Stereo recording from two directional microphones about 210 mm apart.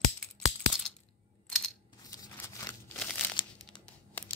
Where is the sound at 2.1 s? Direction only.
15° left (ahead or behind).